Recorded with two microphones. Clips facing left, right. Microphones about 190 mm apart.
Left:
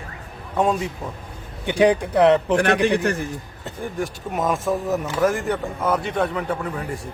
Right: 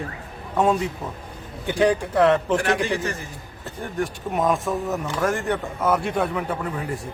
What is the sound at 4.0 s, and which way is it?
A man's voice, centre (ahead or behind).